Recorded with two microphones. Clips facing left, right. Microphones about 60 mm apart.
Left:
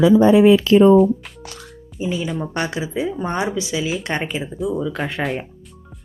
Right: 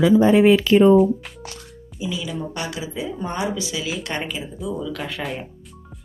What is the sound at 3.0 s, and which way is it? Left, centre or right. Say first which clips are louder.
A woman's voice: left 4 dB; centre.